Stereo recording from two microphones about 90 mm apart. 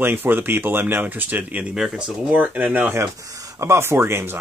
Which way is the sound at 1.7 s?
10° right (ahead or behind).